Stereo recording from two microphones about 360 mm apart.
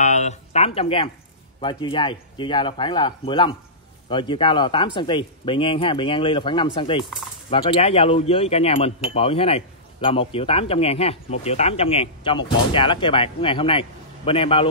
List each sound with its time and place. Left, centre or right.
0.0 s speech: centre